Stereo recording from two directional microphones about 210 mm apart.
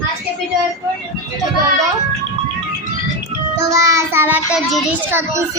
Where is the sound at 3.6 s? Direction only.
15° right (ahead or behind).